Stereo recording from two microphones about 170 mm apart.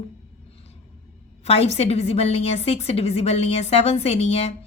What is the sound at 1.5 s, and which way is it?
A woman's voice, 35° left (ahead or behind).